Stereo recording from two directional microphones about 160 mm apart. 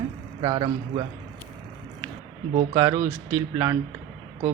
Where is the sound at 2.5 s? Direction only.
25° right (ahead or behind).